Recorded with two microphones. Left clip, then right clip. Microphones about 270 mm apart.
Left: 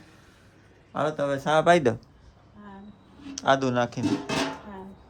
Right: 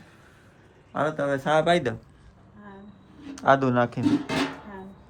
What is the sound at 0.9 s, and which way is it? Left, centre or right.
Speech, centre.